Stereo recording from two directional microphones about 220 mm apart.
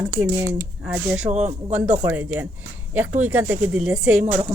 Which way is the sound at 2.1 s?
10° right (ahead or behind).